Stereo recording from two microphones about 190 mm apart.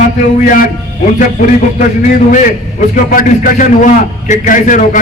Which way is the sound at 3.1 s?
50° left (ahead or behind).